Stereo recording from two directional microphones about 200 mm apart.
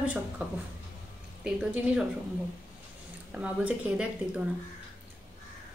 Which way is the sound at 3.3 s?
5° right (ahead or behind).